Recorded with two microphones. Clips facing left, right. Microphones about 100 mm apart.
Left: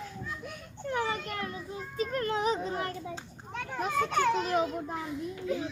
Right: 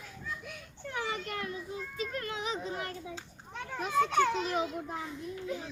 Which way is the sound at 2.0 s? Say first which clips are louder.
Left 8 dB; 45° left (ahead or behind).